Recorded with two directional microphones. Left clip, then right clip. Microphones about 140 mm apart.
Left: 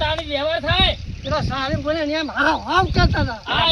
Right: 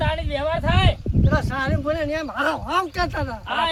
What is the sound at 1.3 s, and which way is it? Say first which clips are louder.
Speech: left 2 dB; 15° right (ahead or behind).